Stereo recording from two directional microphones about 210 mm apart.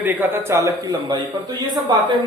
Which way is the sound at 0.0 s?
10° right (ahead or behind).